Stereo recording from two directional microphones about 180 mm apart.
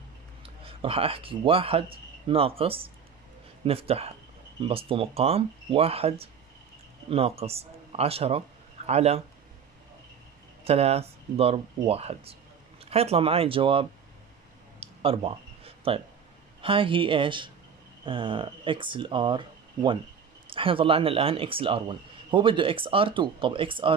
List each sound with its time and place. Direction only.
0.4 s a man's voice: 30° right (ahead or behind)
10.6 s speech: 35° right (ahead or behind)
14.8 s a sound: 30° right (ahead or behind)
16.6 s speech: 30° right (ahead or behind)